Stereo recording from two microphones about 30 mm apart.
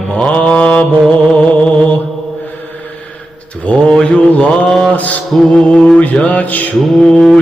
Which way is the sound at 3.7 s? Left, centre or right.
Left.